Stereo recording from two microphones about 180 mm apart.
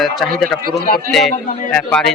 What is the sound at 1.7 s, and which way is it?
Speech, 5° left (ahead or behind).